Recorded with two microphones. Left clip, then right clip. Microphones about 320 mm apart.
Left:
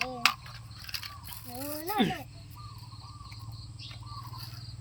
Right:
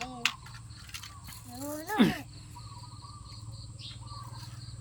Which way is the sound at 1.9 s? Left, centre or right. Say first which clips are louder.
Right 2 dB; centre.